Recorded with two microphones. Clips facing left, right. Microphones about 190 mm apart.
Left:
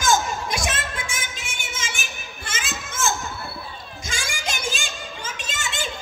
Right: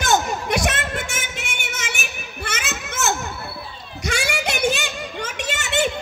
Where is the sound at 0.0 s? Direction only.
65° right (ahead or behind).